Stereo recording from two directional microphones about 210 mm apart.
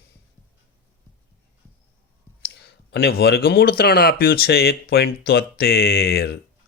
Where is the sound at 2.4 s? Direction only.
50° left (ahead or behind).